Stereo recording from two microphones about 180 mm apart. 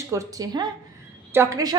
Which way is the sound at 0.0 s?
15° right (ahead or behind).